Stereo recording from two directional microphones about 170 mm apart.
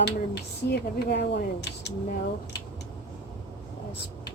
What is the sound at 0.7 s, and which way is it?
Speech, 75° left (ahead or behind).